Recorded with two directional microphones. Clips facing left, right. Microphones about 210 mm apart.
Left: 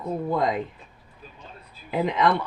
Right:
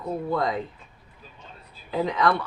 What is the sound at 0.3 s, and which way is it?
Speech, 20° left (ahead or behind).